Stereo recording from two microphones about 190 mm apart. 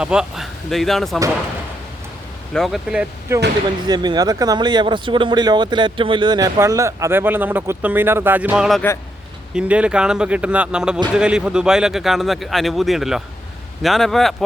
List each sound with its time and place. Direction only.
0.0 s speech: 5° right (ahead or behind)
2.5 s speech: centre (ahead or behind)
3.8 s speech: 20° right (ahead or behind); by 14.3 s centre (ahead or behind)